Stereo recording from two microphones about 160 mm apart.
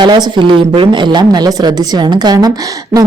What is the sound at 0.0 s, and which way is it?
A woman's voice, 25° right (ahead or behind).